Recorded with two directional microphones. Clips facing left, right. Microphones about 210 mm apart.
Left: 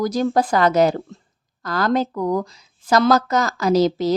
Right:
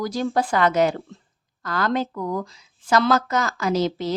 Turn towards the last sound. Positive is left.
turn(degrees=40)  # may be behind; listen again after turning